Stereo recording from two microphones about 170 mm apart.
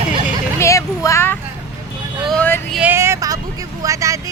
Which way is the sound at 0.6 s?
20° left (ahead or behind).